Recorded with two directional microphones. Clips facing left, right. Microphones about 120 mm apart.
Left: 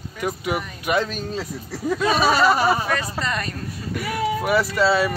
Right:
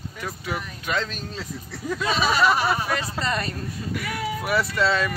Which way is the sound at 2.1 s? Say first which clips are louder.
Left 2 dB; 45° left (ahead or behind).